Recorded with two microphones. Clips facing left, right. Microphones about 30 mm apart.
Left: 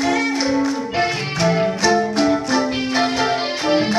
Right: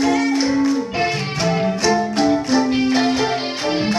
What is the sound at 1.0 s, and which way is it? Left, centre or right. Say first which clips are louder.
Music: left 1 dB; centre.